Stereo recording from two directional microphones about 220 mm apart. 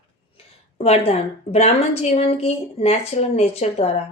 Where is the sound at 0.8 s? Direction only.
25° left (ahead or behind).